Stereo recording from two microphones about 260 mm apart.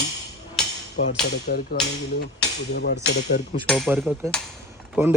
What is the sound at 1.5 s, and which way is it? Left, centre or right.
Speech, left.